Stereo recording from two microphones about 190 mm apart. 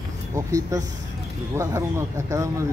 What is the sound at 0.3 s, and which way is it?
Speech, 15° right (ahead or behind).